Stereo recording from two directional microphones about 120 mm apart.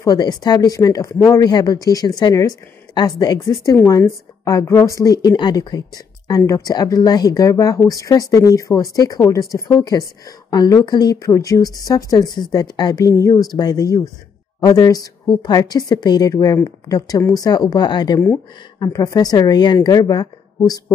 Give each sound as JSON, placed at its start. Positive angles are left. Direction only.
{"t": 0.0, "sound": "a woman's voice", "side_deg": 30}